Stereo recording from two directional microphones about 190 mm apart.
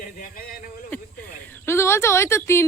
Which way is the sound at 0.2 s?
50° left (ahead or behind).